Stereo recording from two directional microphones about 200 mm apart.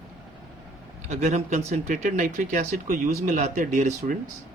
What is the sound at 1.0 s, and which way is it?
Speech, 35° right (ahead or behind).